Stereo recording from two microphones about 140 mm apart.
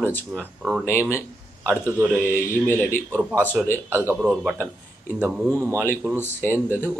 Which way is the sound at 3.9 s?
15° right (ahead or behind).